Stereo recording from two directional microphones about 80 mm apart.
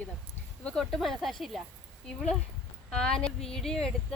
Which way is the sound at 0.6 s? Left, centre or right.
Centre.